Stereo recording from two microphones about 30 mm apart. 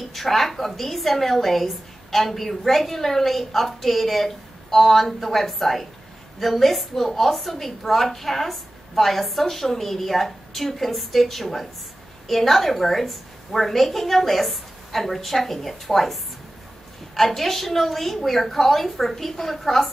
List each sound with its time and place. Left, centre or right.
0.1 s a woman's voice: centre